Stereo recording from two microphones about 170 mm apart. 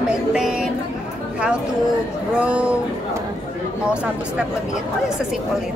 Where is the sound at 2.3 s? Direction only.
5° right (ahead or behind).